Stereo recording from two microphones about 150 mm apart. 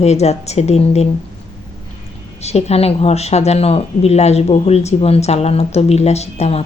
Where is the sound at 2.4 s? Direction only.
45° left (ahead or behind).